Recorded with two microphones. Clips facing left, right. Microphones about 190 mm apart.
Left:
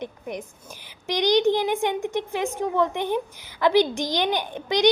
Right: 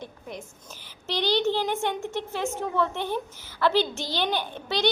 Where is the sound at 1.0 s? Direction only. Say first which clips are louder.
Left 5 dB; 15° left (ahead or behind).